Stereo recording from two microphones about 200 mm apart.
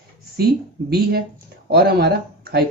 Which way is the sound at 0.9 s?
50° right (ahead or behind).